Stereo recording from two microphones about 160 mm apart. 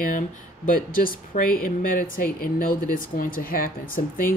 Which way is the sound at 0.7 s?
60° left (ahead or behind).